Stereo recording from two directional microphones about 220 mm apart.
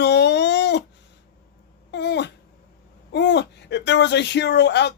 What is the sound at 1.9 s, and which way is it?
Babbling, 50° left (ahead or behind).